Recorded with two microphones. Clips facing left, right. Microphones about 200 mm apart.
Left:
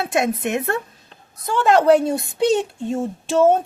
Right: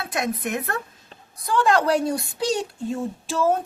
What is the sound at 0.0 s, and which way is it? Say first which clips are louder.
A woman's voice: left 6 dB; 25° left (ahead or behind).